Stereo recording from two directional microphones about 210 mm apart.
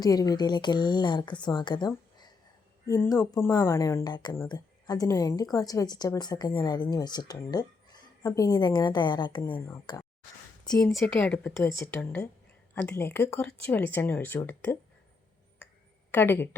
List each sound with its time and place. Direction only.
0.0 s speech: 20° left (ahead or behind)
10.8 s speech: 5° left (ahead or behind)
16.1 s speech: 10° left (ahead or behind)